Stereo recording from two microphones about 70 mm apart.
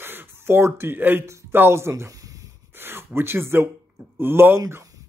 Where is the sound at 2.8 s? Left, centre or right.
Right.